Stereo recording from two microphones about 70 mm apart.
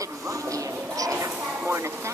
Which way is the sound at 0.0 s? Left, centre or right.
Right.